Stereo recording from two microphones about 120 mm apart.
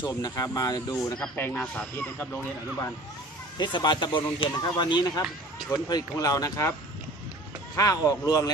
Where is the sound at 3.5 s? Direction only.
40° left (ahead or behind).